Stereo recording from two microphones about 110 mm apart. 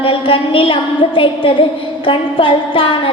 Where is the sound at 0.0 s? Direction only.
55° left (ahead or behind).